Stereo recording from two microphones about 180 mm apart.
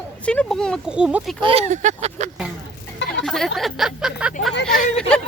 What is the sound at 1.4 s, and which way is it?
Speech, 30° right (ahead or behind).